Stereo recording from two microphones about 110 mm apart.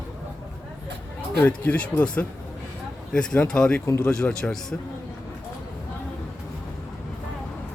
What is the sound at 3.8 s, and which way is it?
Speech, 30° left (ahead or behind).